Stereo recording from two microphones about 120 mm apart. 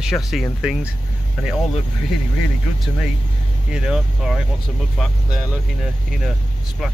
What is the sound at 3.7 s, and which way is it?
Speech, 5° right (ahead or behind).